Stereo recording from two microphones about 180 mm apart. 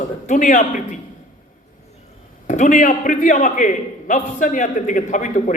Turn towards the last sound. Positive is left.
turn(degrees=45)  # may be behind; listen again after turning